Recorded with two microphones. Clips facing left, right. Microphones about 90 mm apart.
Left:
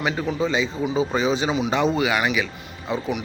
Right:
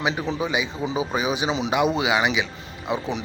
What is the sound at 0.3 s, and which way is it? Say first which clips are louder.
Speech: left 3 dB; 15° right (ahead or behind).